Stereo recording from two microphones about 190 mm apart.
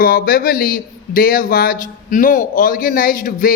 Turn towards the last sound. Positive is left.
turn(degrees=45)  # may be behind; listen again after turning